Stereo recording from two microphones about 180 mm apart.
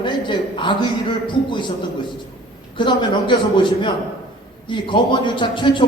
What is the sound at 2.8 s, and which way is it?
Speech, 25° left (ahead or behind).